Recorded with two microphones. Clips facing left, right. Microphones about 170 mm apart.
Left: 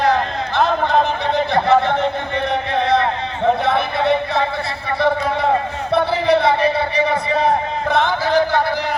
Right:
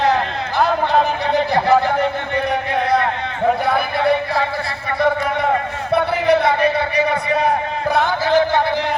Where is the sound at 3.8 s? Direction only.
25° left (ahead or behind).